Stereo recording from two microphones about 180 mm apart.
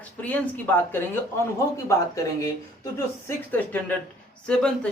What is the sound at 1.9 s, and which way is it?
Speech, 20° left (ahead or behind).